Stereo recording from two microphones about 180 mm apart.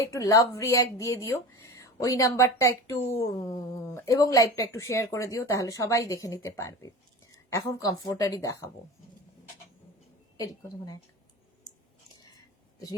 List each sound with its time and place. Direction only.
0.1 s a woman's voice: 20° left (ahead or behind)
10.3 s a woman's voice: 20° left (ahead or behind)